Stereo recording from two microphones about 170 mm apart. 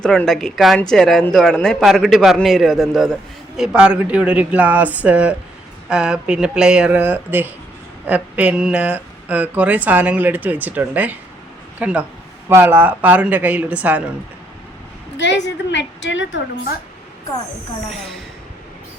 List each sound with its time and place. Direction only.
0.0 s speech: 5° left (ahead or behind)
15.2 s a woman's voice: 90° left
17.9 s speech: centre (ahead or behind)